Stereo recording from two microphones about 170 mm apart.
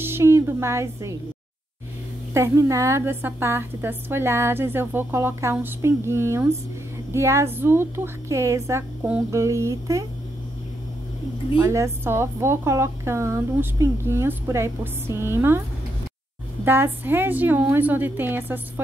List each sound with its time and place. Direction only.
0.0 s a woman's voice: 15° right (ahead or behind)
2.3 s a woman's voice: 20° right (ahead or behind)
11.6 s a woman's voice: 15° right (ahead or behind)
16.6 s a woman's voice: 10° right (ahead or behind)